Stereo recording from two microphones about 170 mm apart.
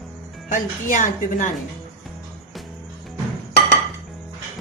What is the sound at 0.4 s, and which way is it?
A woman's voice, 50° left (ahead or behind).